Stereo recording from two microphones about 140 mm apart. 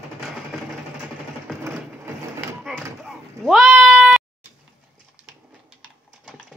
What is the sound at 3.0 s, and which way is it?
Sheep, centre (ahead or behind).